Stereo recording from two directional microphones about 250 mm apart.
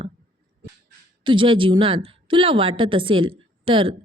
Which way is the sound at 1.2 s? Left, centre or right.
Centre.